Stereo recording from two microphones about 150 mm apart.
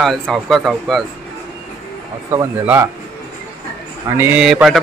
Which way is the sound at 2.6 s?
15° right (ahead or behind).